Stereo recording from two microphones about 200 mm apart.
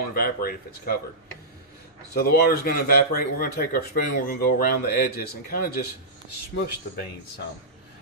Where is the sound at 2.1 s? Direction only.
50° left (ahead or behind).